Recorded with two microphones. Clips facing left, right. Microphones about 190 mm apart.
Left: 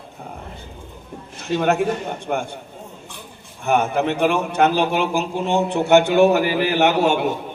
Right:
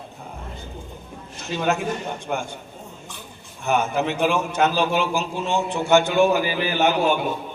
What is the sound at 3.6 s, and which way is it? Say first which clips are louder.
A man's voice: left 3 dB; 55° left (ahead or behind).